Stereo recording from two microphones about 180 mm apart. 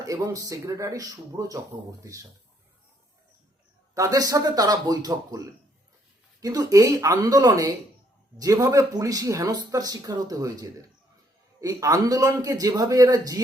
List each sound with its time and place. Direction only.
0.0 s speech: 20° right (ahead or behind)
3.9 s speech: 20° right (ahead or behind)